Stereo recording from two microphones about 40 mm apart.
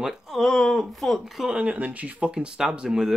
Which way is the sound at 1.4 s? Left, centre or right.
Right.